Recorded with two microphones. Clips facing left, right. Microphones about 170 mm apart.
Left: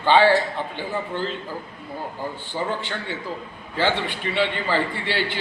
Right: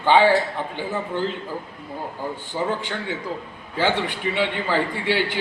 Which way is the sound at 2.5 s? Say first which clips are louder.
Right 2 dB; 10° right (ahead or behind).